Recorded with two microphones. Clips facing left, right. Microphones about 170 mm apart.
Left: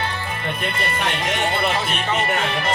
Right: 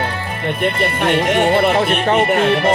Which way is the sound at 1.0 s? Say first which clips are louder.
Right 10 dB; 55° right (ahead or behind).